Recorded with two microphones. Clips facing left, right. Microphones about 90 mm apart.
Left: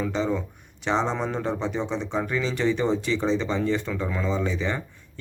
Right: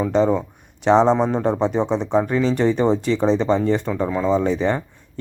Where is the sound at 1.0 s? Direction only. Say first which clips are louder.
Right 9 dB; 25° right (ahead or behind).